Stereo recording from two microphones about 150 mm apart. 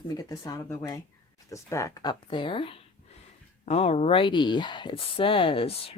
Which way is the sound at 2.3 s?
35° left (ahead or behind).